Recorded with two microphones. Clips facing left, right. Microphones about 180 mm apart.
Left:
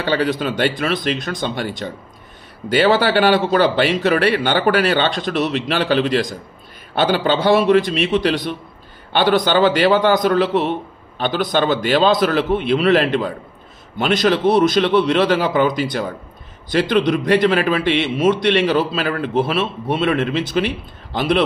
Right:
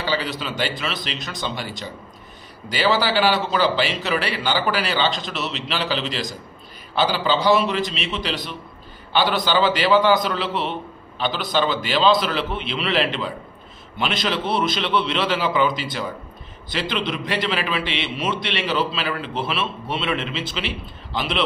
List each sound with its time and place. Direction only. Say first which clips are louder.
0.0 s a man's voice: left 7 dB; 55° left (ahead or behind)